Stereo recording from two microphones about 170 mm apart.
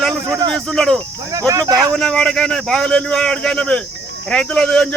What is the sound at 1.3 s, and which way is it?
Speech, 20° right (ahead or behind).